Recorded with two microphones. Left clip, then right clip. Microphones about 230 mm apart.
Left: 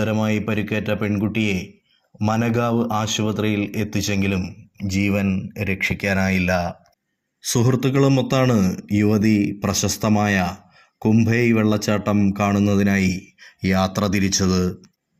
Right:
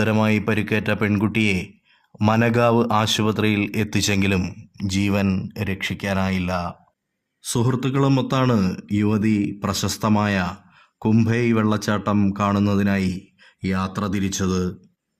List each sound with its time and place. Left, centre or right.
0.0 s speech: right
4.9 s speech: centre
5.6 s speech: centre